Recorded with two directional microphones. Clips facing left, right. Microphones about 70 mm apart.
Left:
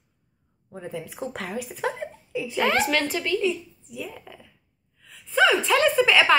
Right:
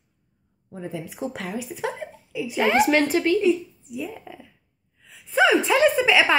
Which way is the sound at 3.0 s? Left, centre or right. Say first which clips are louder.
Right 5 dB; right.